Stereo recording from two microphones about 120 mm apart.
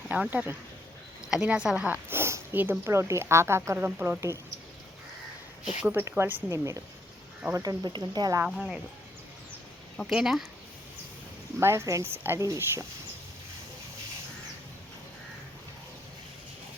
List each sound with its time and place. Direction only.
0.1 s speech: 15° right (ahead or behind)
5.8 s speech: 15° right (ahead or behind); by 8.4 s 30° right (ahead or behind)
8.4 s speech: 5° right (ahead or behind)
10.1 s speech: 5° right (ahead or behind)
11.6 s speech: 25° right (ahead or behind)